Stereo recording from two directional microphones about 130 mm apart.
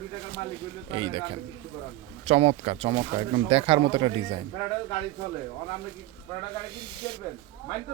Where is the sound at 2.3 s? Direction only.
50° right (ahead or behind).